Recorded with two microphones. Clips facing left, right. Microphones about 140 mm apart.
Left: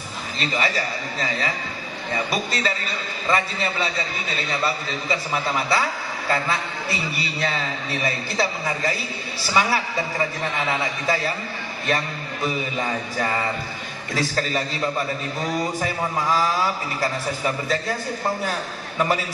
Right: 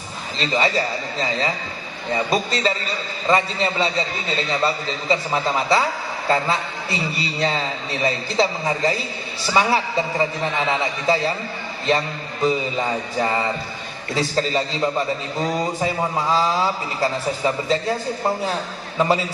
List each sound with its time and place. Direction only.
0.3 s a man's voice: 30° right (ahead or behind)